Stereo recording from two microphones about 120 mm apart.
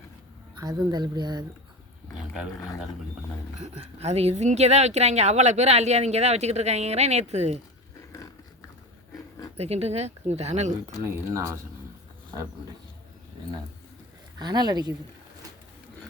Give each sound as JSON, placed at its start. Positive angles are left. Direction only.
{"t": 0.6, "sound": "speech", "side_deg": -30}
{"t": 3.6, "sound": "speech", "side_deg": -60}
{"t": 9.6, "sound": "speech", "side_deg": -60}
{"t": 11.0, "sound": "speech", "side_deg": -25}
{"t": 14.3, "sound": "speech", "side_deg": -35}